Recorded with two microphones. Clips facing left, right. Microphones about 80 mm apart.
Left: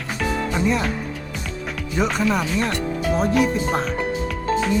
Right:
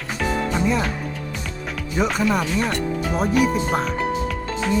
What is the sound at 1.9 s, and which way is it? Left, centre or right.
Speech, centre.